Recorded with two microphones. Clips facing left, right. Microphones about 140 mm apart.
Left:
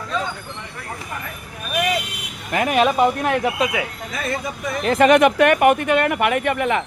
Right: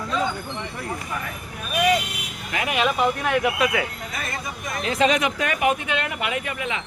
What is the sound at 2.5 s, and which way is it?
Speech, 45° left (ahead or behind).